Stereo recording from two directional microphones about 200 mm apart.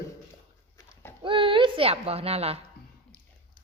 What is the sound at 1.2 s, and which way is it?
A child's voice, 25° right (ahead or behind).